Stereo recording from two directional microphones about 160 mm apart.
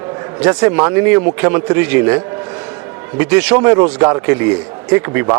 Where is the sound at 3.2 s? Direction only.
10° right (ahead or behind).